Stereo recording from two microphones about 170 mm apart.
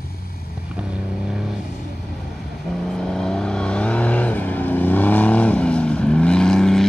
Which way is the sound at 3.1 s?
5° left (ahead or behind).